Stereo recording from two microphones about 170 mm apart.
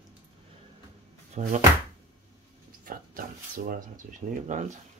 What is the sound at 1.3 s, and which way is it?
Speech, 40° right (ahead or behind).